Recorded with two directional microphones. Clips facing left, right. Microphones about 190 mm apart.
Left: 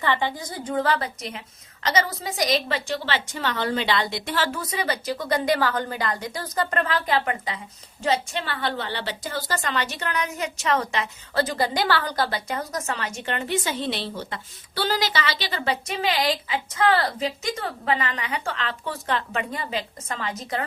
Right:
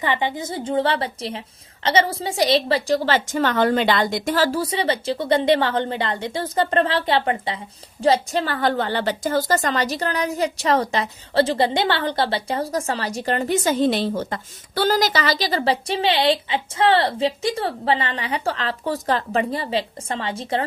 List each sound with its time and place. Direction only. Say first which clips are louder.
0.0 s a woman's voice: right 2 dB; 15° right (ahead or behind)